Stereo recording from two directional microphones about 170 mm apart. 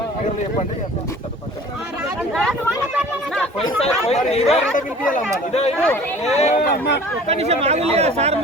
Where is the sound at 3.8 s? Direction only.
35° left (ahead or behind).